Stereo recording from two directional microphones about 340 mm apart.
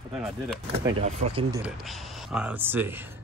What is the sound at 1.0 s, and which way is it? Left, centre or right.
Speech, centre.